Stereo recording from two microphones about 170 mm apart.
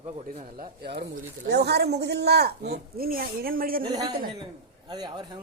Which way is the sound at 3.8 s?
25° right (ahead or behind).